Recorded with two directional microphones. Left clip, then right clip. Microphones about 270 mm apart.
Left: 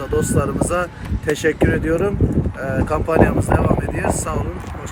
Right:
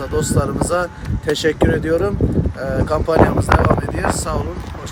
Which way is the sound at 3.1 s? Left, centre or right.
Left.